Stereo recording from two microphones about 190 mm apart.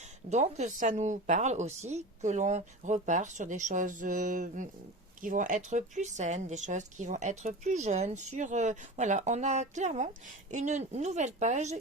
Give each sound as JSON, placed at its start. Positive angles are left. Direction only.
{"t": 0.3, "sound": "a woman's voice", "side_deg": -35}